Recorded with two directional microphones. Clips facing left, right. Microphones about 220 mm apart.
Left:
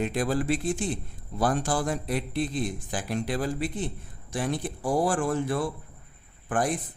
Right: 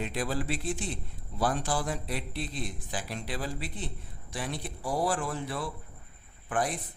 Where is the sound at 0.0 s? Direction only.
50° left (ahead or behind).